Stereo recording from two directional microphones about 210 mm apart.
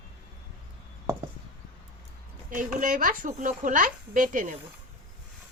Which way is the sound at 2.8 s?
40° right (ahead or behind).